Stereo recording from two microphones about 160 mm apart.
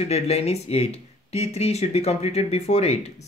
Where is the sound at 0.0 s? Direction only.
40° left (ahead or behind).